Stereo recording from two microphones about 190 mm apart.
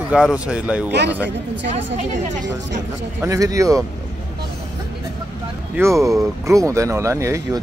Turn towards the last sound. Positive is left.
turn(degrees=-15)  # may be behind; listen again after turning